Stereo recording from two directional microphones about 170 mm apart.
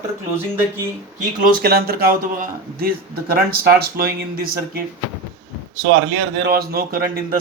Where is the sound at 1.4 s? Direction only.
55° right (ahead or behind).